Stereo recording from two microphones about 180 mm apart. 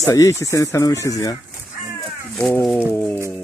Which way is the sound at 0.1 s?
15° left (ahead or behind).